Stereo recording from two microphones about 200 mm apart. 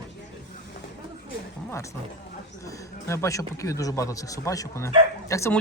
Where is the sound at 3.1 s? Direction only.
15° left (ahead or behind).